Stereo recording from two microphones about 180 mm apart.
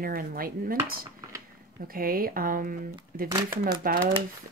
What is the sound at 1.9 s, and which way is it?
Speech, 55° right (ahead or behind).